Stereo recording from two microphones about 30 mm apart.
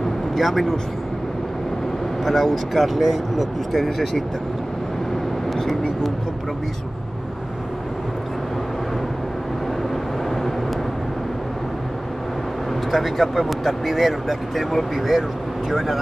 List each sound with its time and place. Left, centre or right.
0.4 s speech: centre
2.2 s speech: centre
5.5 s speech: centre
12.9 s speech: centre